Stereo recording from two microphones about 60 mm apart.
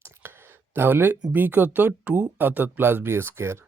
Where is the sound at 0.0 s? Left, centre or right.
Right.